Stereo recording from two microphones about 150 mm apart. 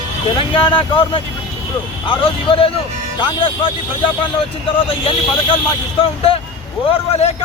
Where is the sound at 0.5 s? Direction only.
35° left (ahead or behind).